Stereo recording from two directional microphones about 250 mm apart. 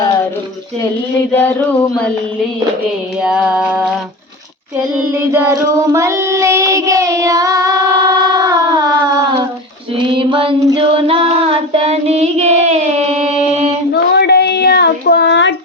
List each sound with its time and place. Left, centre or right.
3.2 s music: centre
5.1 s child singing: centre
10.1 s child singing: right
13.9 s a sound: left